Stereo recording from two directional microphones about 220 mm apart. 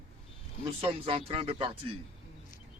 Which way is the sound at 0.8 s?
25° right (ahead or behind).